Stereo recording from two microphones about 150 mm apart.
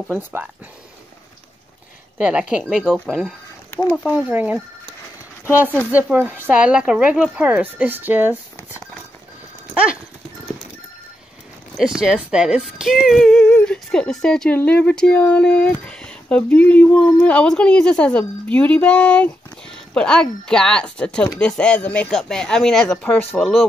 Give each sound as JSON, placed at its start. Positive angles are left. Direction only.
{"t": 0.1, "sound": "speech", "side_deg": -15}
{"t": 2.1, "sound": "a woman's voice", "side_deg": -5}
{"t": 5.9, "sound": "speech", "side_deg": -10}
{"t": 11.7, "sound": "speech", "side_deg": -5}
{"t": 13.4, "sound": "speech", "side_deg": 10}